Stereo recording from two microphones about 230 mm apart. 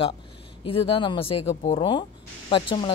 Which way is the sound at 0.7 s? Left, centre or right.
Left.